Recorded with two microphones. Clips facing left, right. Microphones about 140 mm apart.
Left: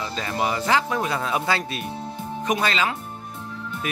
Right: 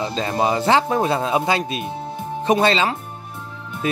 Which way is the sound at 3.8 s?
30° right (ahead or behind).